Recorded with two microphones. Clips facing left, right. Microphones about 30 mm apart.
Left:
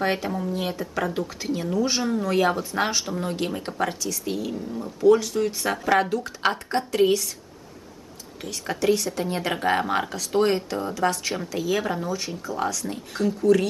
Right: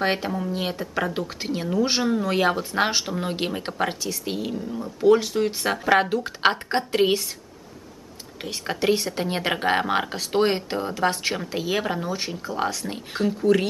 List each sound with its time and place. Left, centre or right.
0.0 s speech: right
4.6 s speech: centre
5.0 s speech: right
8.4 s speech: right